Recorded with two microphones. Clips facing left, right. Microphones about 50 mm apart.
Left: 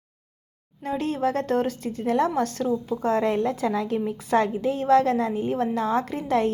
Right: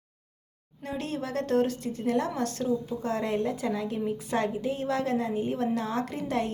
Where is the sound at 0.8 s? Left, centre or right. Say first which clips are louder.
Left 8 dB; left.